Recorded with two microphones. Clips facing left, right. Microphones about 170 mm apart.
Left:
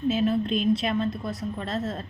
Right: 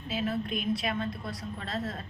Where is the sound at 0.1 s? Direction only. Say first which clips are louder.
Left 6 dB; 25° left (ahead or behind).